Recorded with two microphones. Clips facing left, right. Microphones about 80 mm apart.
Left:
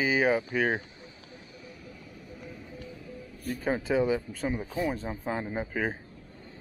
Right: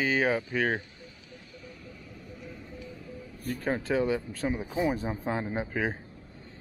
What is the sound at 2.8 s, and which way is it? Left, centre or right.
Music, centre.